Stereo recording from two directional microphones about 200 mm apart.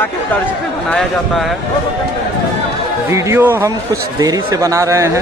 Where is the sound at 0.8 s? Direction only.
5° left (ahead or behind).